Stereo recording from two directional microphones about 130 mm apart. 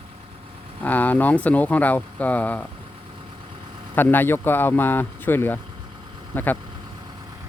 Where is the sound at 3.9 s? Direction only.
15° left (ahead or behind).